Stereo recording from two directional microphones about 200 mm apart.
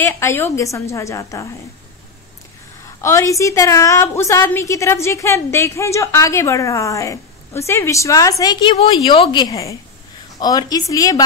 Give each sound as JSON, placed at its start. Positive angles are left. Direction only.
{"t": 0.0, "sound": "a woman's voice", "side_deg": 10}
{"t": 3.0, "sound": "a woman's voice", "side_deg": 15}